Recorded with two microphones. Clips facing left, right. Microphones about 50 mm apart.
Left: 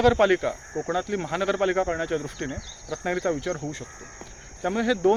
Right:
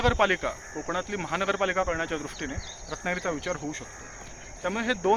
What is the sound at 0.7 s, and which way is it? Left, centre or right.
Speech, right.